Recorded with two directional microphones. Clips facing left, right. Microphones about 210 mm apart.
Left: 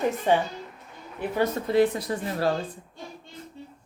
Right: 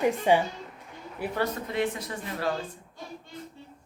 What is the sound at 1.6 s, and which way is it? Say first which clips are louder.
Speech: left 8 dB; 35° left (ahead or behind).